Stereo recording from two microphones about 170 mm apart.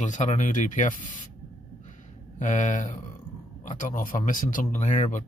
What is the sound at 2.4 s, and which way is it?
Speech, 45° left (ahead or behind).